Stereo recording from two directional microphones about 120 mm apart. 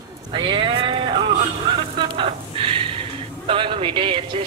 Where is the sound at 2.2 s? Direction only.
45° right (ahead or behind).